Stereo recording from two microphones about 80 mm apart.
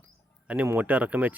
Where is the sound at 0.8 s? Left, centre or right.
Centre.